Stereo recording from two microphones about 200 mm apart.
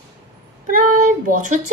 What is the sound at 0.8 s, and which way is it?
Child singing, 40° right (ahead or behind).